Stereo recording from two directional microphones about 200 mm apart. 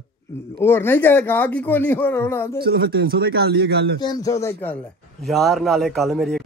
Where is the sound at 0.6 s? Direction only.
10° left (ahead or behind).